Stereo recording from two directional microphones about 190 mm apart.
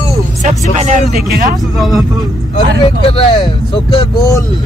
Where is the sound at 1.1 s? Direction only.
55° right (ahead or behind).